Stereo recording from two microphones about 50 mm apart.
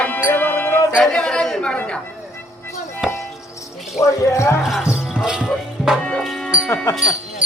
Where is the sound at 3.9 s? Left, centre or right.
Left.